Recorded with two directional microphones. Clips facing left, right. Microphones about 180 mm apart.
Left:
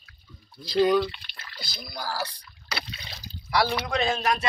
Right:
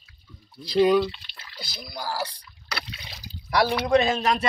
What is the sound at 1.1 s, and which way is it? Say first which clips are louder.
Drip: left 1 dB; 50° left (ahead or behind).